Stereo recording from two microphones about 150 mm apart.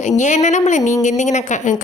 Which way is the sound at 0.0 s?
55° left (ahead or behind).